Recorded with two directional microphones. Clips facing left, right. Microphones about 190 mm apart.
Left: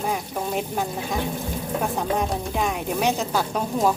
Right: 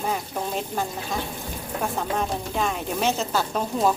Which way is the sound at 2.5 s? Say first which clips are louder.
Left 1 dB; 10° left (ahead or behind).